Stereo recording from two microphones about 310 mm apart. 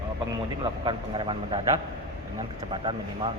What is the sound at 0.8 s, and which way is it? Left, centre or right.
Speech, centre.